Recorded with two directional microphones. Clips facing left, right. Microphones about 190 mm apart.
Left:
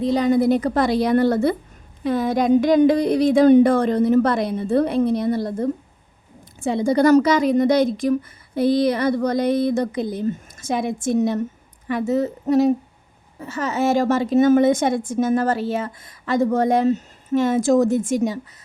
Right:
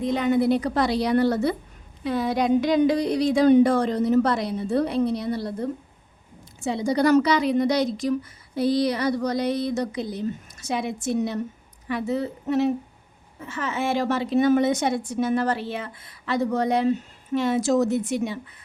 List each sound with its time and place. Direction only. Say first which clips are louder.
0.0 s a woman's voice: left 4 dB; 35° left (ahead or behind)